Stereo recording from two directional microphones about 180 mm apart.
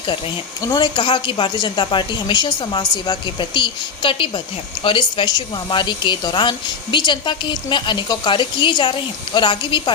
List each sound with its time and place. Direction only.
0.7 s speech: 25° left (ahead or behind)